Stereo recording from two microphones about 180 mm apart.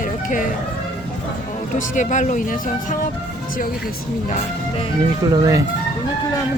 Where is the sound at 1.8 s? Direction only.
45° left (ahead or behind).